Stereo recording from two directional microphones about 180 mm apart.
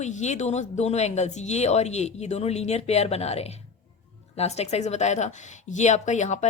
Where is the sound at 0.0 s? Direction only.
40° left (ahead or behind).